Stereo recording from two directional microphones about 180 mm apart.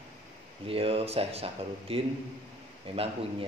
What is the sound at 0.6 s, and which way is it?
A man's voice, 30° right (ahead or behind).